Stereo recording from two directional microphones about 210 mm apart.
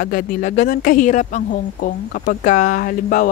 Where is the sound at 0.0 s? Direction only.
40° left (ahead or behind).